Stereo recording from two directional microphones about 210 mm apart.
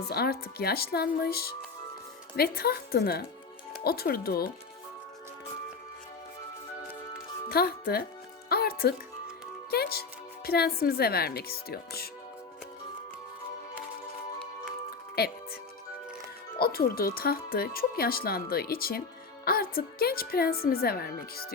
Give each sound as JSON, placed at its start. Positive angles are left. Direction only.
{"t": 0.1, "sound": "speech", "side_deg": 50}
{"t": 7.4, "sound": "speech", "side_deg": 50}
{"t": 8.4, "sound": "music", "side_deg": 50}
{"t": 9.6, "sound": "speech", "side_deg": 45}
{"t": 15.2, "sound": "speech", "side_deg": 50}
{"t": 16.6, "sound": "speech", "side_deg": 45}